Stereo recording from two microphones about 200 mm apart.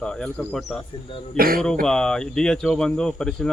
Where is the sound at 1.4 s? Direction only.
50° right (ahead or behind).